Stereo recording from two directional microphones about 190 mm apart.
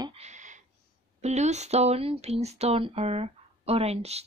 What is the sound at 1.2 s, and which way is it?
Speech, 35° right (ahead or behind).